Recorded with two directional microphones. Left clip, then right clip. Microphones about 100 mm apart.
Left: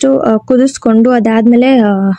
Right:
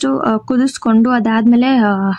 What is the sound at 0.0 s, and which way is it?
Speech, 20° left (ahead or behind).